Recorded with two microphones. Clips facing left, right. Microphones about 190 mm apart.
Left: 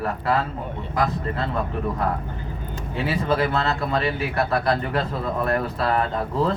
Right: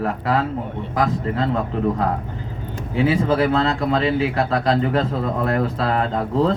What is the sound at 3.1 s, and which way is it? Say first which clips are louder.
Speech: right 4 dB; 90° right.